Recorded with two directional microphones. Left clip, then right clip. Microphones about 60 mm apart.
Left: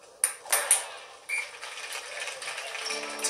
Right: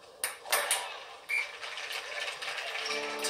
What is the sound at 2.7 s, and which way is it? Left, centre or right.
Music, right.